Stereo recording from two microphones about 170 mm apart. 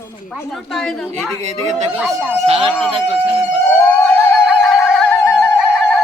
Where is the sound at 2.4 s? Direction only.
35° right (ahead or behind).